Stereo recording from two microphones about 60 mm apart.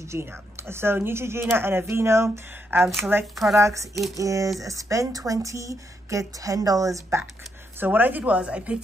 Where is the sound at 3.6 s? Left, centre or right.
Right.